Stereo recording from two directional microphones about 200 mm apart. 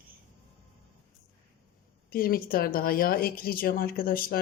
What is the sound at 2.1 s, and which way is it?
Speech, 45° left (ahead or behind).